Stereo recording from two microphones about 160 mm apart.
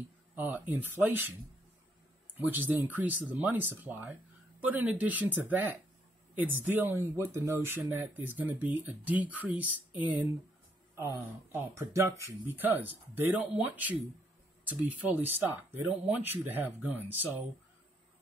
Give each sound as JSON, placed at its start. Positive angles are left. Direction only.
{"t": 0.4, "sound": "speech", "side_deg": -10}
{"t": 2.3, "sound": "speech", "side_deg": -10}